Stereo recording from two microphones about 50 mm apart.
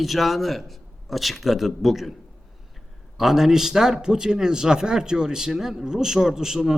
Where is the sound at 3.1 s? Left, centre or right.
Centre.